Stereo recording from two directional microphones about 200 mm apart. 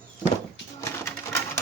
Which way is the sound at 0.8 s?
15° left (ahead or behind).